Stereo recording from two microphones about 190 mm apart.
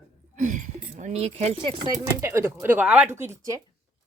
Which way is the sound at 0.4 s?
40° right (ahead or behind).